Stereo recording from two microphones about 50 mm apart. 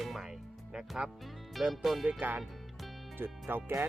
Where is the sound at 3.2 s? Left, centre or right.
Right.